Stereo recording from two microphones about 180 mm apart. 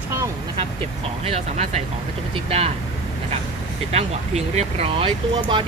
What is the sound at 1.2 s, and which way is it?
Speech, 35° right (ahead or behind).